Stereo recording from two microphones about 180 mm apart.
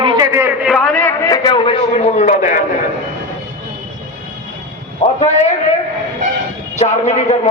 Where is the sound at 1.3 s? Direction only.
25° left (ahead or behind); by 2.6 s 40° left (ahead or behind).